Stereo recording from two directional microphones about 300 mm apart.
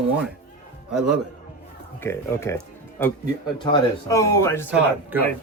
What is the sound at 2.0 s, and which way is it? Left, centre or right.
Speech, centre.